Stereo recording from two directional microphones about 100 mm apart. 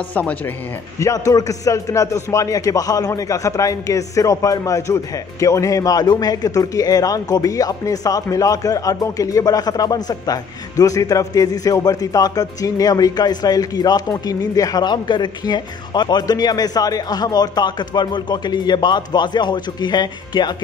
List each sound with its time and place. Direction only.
0.1 s speech: 15° left (ahead or behind)
0.9 s a man's voice: 35° left (ahead or behind)